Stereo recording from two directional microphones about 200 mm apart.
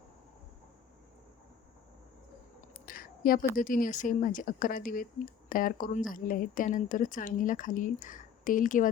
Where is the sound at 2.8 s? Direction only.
45° left (ahead or behind).